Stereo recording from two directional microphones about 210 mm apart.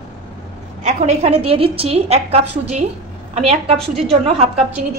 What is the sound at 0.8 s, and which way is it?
A woman's voice, 35° right (ahead or behind).